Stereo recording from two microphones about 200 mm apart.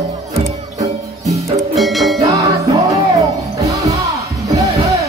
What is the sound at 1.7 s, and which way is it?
Music, centre (ahead or behind).